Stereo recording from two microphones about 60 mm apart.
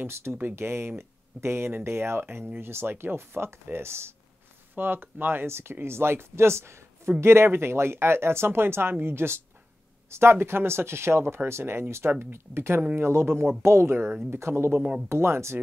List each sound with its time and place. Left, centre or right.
0.0 s speech: right
4.7 s speech: right